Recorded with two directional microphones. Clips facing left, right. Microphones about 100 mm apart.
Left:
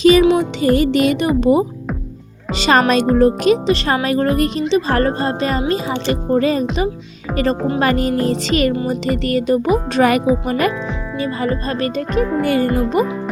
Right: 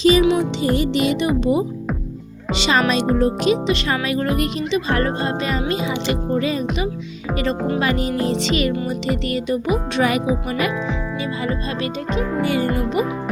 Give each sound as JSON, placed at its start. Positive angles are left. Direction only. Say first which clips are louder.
{"t": 0.0, "sound": "music", "louder": "left 4 dB", "side_deg": 55}
{"t": 0.8, "sound": "speech", "louder": "left 4 dB", "side_deg": 50}
{"t": 7.8, "sound": "speech", "louder": "left 4 dB", "side_deg": 45}
{"t": 8.7, "sound": "speech", "louder": "left 4 dB", "side_deg": 30}
{"t": 9.2, "sound": "speech", "louder": "left 5 dB", "side_deg": 45}
{"t": 12.7, "sound": "speech", "louder": "left 4 dB", "side_deg": 35}